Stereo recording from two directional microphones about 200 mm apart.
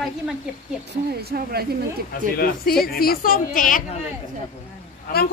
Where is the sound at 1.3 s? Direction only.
50° right (ahead or behind).